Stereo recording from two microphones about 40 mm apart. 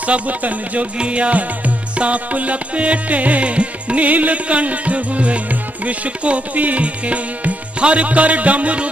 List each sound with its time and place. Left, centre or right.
0.0 s music: right
0.9 s music: right